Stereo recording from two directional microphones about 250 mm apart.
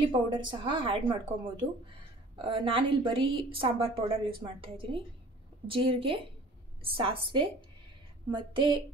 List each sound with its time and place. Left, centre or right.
0.1 s a woman's voice: centre
2.4 s a woman's voice: right